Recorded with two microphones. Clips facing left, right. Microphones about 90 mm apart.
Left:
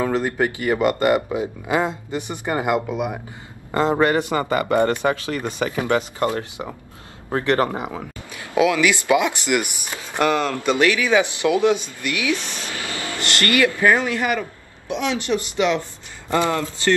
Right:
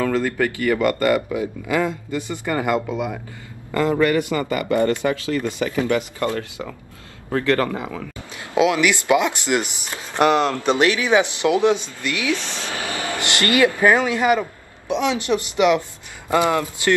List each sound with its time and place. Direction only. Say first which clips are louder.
0.0 s speech: even; 20° left (ahead or behind)
8.5 s speech: even; 20° right (ahead or behind)